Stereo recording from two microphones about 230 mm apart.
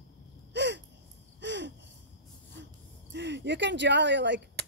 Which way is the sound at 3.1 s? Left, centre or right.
Right.